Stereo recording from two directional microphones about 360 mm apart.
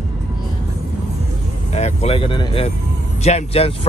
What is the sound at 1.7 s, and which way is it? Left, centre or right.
Speech, centre.